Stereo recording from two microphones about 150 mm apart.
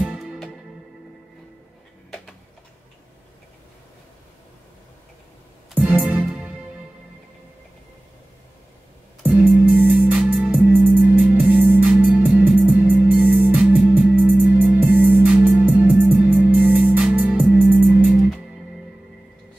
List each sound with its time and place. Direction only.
0.0 s music: 5° right (ahead or behind)
2.0 s a sound: 5° left (ahead or behind)
5.8 s music: 5° right (ahead or behind)
9.2 s music: 10° right (ahead or behind)